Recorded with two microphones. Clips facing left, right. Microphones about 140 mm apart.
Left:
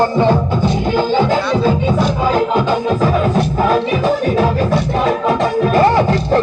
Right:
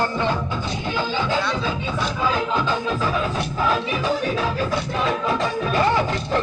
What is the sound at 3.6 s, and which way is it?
Music, 45° left (ahead or behind).